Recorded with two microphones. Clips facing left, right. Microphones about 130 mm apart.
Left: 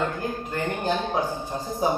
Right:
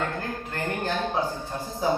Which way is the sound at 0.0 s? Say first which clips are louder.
Left 3 dB; 15° left (ahead or behind).